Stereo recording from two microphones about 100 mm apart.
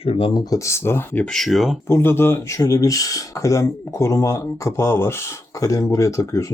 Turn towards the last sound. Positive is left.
turn(degrees=35)  # may be behind; listen again after turning